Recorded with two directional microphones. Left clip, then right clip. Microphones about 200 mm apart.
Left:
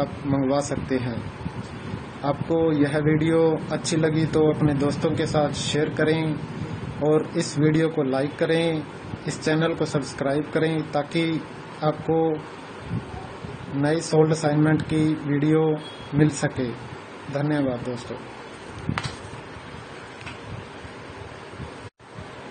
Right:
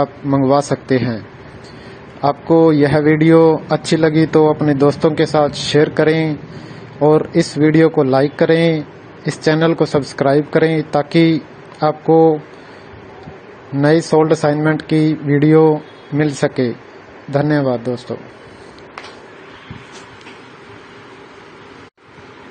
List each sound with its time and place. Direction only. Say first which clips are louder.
0.0 s a man's voice: right 9 dB; 40° right (ahead or behind)
2.4 s a man's voice: right 11 dB; 40° right (ahead or behind)
13.7 s a man's voice: right 8 dB; 40° right (ahead or behind)